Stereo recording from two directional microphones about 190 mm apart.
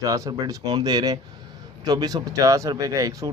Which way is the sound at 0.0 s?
20° right (ahead or behind).